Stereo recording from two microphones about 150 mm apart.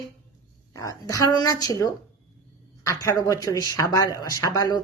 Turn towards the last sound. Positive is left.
turn(degrees=25)  # may be behind; listen again after turning